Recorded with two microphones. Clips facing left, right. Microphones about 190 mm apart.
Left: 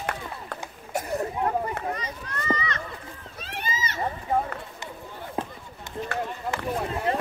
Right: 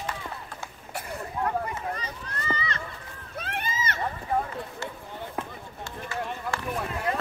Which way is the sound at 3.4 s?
55° right (ahead or behind).